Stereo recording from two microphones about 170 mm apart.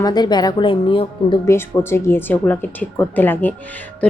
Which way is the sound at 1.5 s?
15° left (ahead or behind).